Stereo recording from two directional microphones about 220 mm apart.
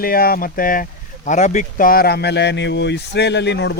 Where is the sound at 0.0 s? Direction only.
40° left (ahead or behind).